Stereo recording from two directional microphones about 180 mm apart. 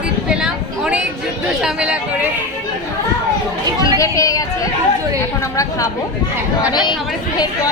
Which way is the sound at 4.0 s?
20° left (ahead or behind).